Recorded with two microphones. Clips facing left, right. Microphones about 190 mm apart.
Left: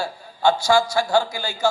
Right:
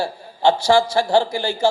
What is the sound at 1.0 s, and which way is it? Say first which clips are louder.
Speech: right 3 dB; 35° right (ahead or behind).